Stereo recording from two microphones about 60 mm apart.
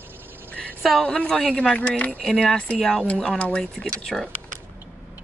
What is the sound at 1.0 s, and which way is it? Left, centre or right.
Speech, centre.